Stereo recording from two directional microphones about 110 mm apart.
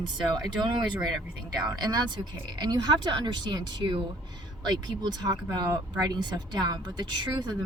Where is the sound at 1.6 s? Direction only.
40° right (ahead or behind).